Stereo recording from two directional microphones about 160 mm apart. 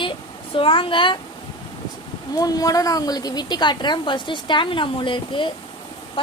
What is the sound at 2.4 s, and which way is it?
A woman's voice, 25° left (ahead or behind).